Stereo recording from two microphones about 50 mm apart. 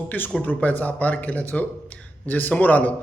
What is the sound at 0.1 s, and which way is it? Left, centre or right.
A man's voice, left.